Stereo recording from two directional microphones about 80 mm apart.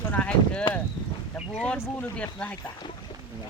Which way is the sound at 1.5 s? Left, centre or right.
Centre.